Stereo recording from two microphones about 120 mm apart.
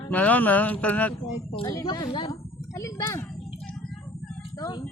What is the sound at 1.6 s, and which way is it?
Speech, 30° left (ahead or behind).